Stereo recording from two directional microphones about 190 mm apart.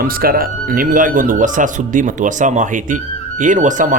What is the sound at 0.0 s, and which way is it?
Speech, 50° right (ahead or behind).